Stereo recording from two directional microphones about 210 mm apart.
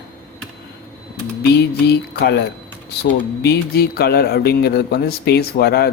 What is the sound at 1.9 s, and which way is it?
Speech, 50° left (ahead or behind).